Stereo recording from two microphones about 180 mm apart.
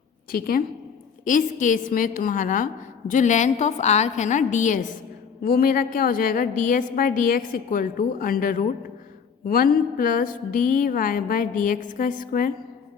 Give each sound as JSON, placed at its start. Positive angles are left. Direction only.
{"t": 0.3, "sound": "a woman's voice", "side_deg": 55}